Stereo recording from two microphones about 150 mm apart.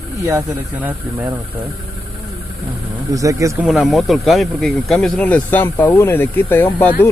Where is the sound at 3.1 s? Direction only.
20° right (ahead or behind).